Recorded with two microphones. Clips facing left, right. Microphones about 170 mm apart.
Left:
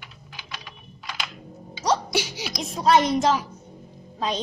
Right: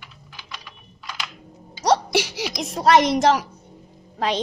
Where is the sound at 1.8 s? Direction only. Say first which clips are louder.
Right 4 dB; 75° right (ahead or behind).